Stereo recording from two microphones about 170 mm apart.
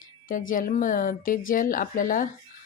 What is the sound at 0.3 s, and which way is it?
A woman's voice, 50° left (ahead or behind).